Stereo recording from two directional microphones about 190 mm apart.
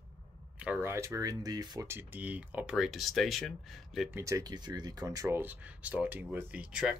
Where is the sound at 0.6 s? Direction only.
10° right (ahead or behind).